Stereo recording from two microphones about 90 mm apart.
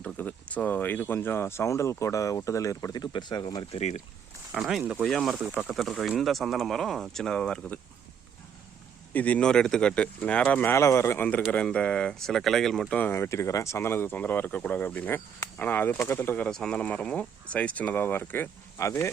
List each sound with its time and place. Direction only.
0.0 s speech: 15° left (ahead or behind); by 2.9 s 35° left (ahead or behind)
2.9 s speech: 55° left (ahead or behind)
4.5 s speech: centre (ahead or behind)
4.8 s speech: 15° right (ahead or behind)
5.0 s speech: centre (ahead or behind)
5.7 s speech: centre (ahead or behind)
9.1 s speech: 15° left (ahead or behind)
12.9 s speech: 20° left (ahead or behind)
16.5 s speech: 5° left (ahead or behind); by 19.1 s 30° left (ahead or behind)